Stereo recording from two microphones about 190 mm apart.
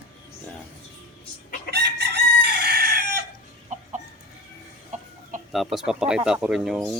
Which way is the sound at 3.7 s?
40° right (ahead or behind).